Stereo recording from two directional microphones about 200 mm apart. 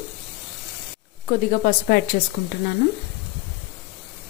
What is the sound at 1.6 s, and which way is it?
Speech, 50° left (ahead or behind).